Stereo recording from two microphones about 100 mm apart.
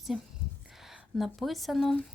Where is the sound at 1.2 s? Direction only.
Centre (ahead or behind).